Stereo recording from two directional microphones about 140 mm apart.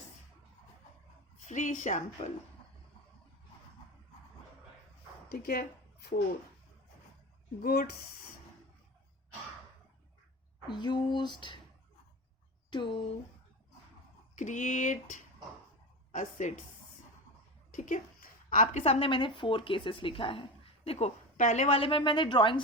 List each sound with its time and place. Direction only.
1.5 s speech: 60° left (ahead or behind)
5.3 s speech: 90° left
7.6 s speech: 90° left
10.7 s speech: 30° left (ahead or behind)
12.7 s speech: 35° left (ahead or behind)
14.3 s speech: 60° left (ahead or behind)
17.7 s a sound: 65° left (ahead or behind)
18.8 s speech: 40° left (ahead or behind)
21.3 s speech: 60° left (ahead or behind); by 22.6 s 35° left (ahead or behind)